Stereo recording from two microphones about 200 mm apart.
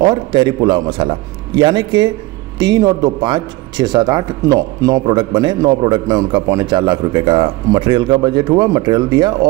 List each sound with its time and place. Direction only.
0.0 s speech: 20° right (ahead or behind)